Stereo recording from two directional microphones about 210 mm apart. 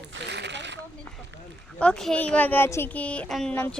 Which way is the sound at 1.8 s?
5° left (ahead or behind).